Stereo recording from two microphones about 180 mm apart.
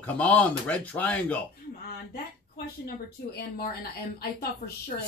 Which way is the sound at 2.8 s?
55° left (ahead or behind).